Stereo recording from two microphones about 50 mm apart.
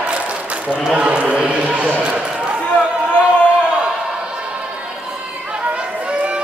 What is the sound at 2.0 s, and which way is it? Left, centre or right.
Basketball bounce, right.